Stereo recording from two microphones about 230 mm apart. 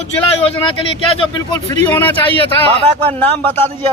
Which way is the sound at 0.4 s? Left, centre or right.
Left.